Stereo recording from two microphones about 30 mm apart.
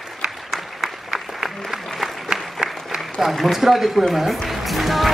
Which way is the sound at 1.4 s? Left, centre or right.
Centre.